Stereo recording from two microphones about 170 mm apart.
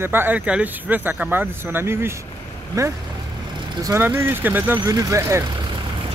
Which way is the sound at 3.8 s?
15° right (ahead or behind).